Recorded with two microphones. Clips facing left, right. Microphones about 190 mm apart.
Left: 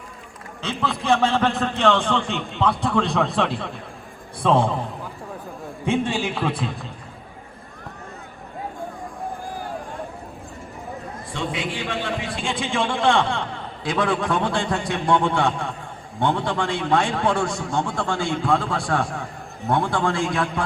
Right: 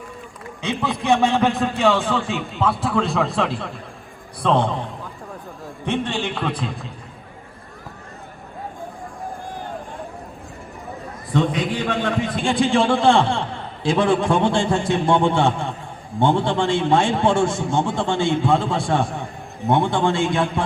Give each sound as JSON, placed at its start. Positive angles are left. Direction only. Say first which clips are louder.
{"t": 0.6, "sound": "a man's voice", "louder": "right 2 dB", "side_deg": -15}
{"t": 1.5, "sound": "a man's voice", "louder": "right 1 dB", "side_deg": 0}
{"t": 6.1, "sound": "a man's voice", "louder": "even", "side_deg": 0}
{"t": 11.3, "sound": "a man's voice", "louder": "right 8 dB", "side_deg": -40}
{"t": 18.3, "sound": "a man's voice", "louder": "right 3 dB", "side_deg": 0}
{"t": 19.9, "sound": "a man's voice", "louder": "right 3 dB", "side_deg": -25}